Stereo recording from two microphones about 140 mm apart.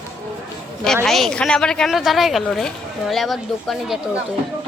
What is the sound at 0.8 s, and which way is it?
Speech, 5° left (ahead or behind).